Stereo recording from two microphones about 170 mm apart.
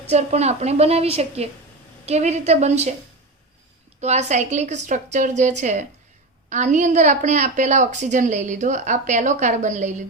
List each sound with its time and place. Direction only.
0.1 s a woman's voice: 40° right (ahead or behind)
4.0 s a woman's voice: 40° right (ahead or behind)